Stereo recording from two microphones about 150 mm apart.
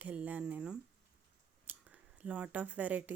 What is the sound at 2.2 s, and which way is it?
Speech, 10° right (ahead or behind).